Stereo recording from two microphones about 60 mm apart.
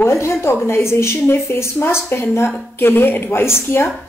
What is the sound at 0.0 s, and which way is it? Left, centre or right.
A woman's voice, left.